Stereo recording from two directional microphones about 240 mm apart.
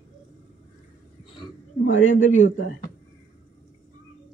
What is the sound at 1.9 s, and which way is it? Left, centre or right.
Speech, left.